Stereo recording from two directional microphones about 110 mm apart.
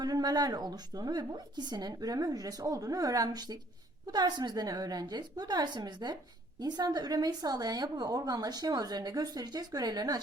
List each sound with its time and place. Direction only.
0.0 s a woman's voice: 35° right (ahead or behind)